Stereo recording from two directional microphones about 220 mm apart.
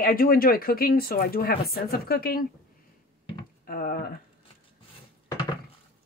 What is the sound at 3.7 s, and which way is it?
Speech, 40° left (ahead or behind).